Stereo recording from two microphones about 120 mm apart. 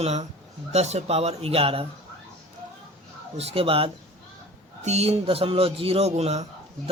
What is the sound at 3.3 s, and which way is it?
Speech, 55° right (ahead or behind).